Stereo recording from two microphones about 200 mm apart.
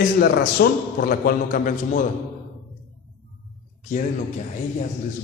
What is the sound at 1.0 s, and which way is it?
A man's voice, 45° left (ahead or behind).